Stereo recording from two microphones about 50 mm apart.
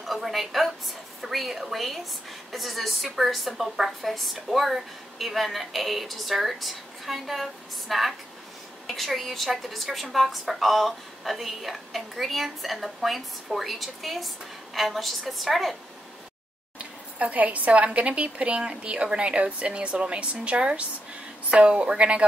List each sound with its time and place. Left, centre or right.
0.0 s a woman's voice: centre
16.7 s a woman's voice: right